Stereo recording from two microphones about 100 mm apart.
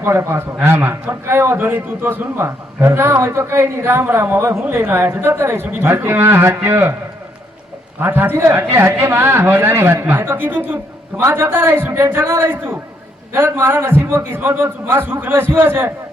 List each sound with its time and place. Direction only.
0.0 s a man's voice: 25° right (ahead or behind)
8.0 s a man's voice: 20° right (ahead or behind)